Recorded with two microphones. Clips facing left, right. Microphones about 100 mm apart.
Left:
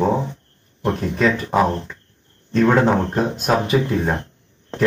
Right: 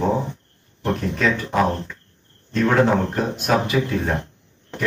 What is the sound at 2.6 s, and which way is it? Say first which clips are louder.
Speech: left 2 dB; 30° left (ahead or behind).